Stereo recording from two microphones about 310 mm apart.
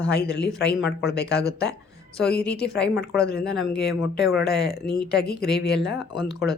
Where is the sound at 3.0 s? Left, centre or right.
Left.